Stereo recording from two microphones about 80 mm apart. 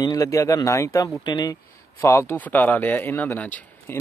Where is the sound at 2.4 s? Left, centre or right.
Left.